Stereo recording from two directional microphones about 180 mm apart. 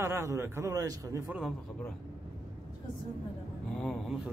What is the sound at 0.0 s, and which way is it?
A man's voice, 15° right (ahead or behind).